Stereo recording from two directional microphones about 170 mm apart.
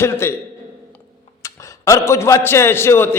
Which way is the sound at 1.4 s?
20° left (ahead or behind).